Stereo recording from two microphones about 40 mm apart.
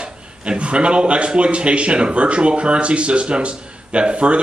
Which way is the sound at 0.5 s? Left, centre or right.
Right.